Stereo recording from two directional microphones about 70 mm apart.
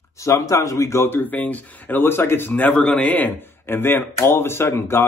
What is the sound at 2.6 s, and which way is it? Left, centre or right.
A man's voice, centre.